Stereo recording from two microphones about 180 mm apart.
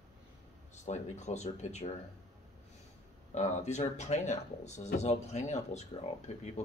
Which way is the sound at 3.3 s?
40° left (ahead or behind).